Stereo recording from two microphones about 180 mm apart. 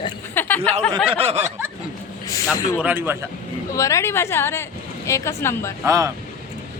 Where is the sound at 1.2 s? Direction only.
35° right (ahead or behind).